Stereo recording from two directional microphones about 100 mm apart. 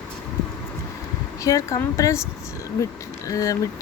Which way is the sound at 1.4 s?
35° left (ahead or behind).